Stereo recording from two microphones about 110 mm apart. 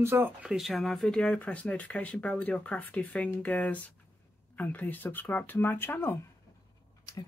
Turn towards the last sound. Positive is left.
turn(degrees=20)  # may be behind; listen again after turning